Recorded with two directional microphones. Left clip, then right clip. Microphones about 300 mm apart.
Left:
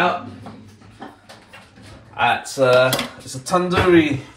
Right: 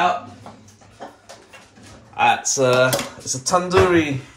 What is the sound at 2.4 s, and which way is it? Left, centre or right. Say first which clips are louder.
Speech: left 2 dB; right.